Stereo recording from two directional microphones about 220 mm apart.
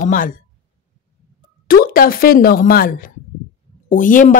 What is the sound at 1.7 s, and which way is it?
Speech, 40° left (ahead or behind).